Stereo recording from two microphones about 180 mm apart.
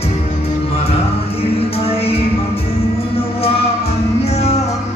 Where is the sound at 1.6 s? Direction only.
35° left (ahead or behind).